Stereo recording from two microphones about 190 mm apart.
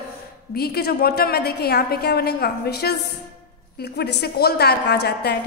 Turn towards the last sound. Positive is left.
turn(degrees=60)  # may be behind; listen again after turning